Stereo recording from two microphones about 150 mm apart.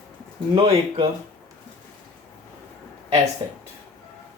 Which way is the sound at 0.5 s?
35° right (ahead or behind).